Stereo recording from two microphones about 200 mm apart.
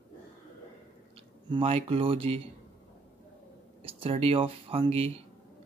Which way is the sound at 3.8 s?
25° right (ahead or behind).